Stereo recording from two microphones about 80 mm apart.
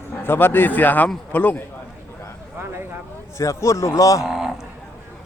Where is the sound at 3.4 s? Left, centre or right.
Left.